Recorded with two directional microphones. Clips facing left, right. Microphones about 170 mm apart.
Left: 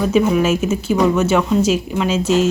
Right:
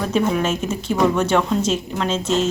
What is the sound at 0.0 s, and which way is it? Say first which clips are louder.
A woman's voice: left 5 dB; 5° left (ahead or behind).